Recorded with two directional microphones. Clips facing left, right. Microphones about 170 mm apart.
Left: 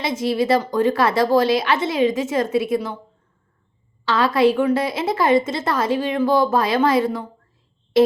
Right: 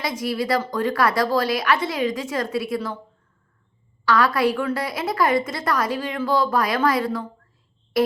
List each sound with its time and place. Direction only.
0.0 s a woman's voice: 25° left (ahead or behind)
4.0 s a woman's voice: 25° left (ahead or behind)
7.9 s music: 25° left (ahead or behind)